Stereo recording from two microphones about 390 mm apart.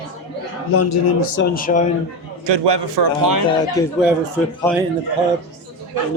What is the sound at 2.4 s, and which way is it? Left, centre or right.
Speech, right.